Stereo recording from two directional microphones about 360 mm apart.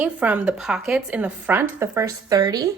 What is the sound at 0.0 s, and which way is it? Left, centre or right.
Speech, centre.